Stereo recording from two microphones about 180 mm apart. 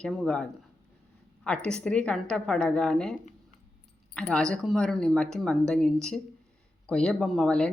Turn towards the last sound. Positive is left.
turn(degrees=5)  # may be behind; listen again after turning